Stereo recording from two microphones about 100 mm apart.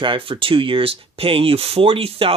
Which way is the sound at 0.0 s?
60° right (ahead or behind).